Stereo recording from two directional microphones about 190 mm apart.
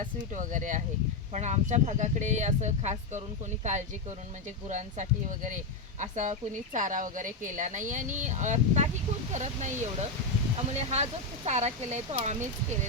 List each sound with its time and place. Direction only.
0.0 s speech: 40° right (ahead or behind)